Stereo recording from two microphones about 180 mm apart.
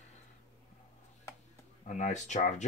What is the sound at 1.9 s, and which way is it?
Speech, 45° left (ahead or behind).